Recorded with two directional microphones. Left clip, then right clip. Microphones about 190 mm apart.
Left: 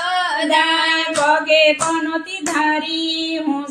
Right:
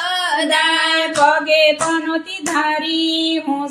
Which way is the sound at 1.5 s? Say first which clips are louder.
Even; 50° right (ahead or behind).